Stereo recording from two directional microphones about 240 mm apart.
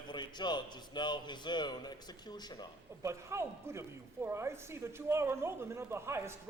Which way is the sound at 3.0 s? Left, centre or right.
Centre.